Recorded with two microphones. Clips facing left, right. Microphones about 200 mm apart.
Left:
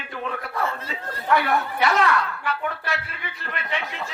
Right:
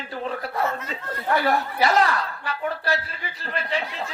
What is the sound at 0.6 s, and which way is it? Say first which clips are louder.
Speech: right 1 dB; 30° left (ahead or behind).